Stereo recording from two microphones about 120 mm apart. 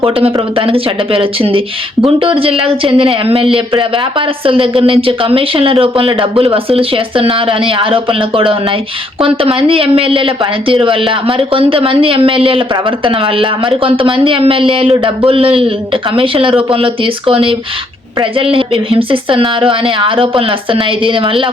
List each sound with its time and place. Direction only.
0.0 s speech: 50° right (ahead or behind)